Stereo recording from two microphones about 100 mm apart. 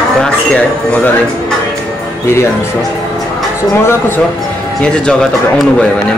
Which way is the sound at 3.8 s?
20° left (ahead or behind).